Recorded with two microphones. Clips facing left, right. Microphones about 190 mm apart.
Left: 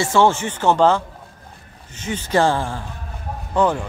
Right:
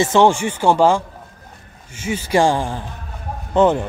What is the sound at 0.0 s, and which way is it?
Speech, 20° right (ahead or behind).